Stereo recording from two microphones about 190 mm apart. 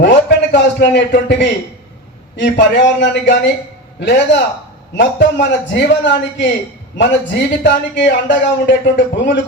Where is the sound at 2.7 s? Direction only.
70° left (ahead or behind).